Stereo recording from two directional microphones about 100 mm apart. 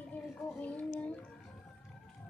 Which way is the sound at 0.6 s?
15° left (ahead or behind).